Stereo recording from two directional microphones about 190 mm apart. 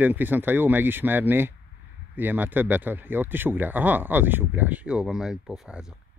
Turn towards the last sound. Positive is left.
turn(degrees=-5)  # may be behind; listen again after turning